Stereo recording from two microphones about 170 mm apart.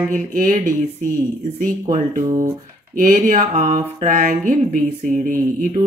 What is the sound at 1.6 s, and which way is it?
Speech, 50° right (ahead or behind).